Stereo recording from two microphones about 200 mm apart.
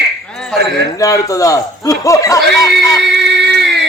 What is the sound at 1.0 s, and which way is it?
Speech, 15° left (ahead or behind).